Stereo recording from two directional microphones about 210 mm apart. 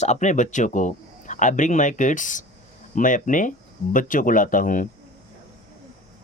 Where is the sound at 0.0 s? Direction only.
35° left (ahead or behind).